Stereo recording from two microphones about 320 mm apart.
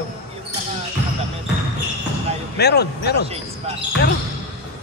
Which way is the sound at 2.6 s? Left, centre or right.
Left.